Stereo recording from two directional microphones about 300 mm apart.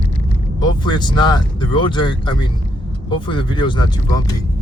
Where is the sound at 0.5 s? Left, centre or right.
Centre.